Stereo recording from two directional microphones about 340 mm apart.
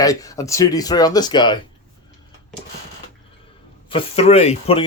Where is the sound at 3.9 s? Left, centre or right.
Centre.